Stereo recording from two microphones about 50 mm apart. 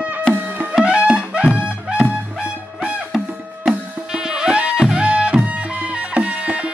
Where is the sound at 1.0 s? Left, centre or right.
Centre.